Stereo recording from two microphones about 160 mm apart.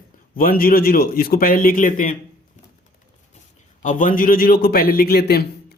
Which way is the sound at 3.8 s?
55° left (ahead or behind).